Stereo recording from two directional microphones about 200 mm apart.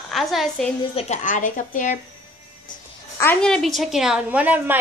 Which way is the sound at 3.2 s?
5° left (ahead or behind).